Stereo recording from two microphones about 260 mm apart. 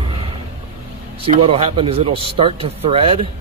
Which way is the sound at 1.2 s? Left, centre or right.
Right.